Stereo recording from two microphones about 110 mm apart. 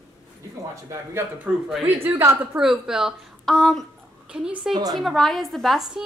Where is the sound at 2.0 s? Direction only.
20° right (ahead or behind).